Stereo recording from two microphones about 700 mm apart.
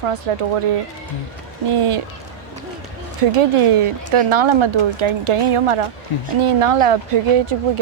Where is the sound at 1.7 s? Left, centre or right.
Right.